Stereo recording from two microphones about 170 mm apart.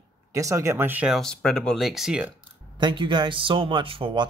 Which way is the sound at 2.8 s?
30° right (ahead or behind).